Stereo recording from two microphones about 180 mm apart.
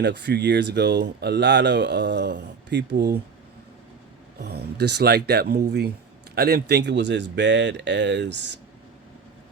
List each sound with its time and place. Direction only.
0.0 s speech: 70° right (ahead or behind)
4.5 s speech: 65° right (ahead or behind)